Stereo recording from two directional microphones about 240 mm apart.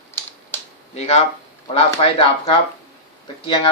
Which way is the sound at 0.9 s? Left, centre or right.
Left.